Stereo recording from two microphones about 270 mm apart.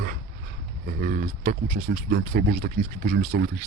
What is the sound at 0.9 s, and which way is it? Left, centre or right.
Speech, right.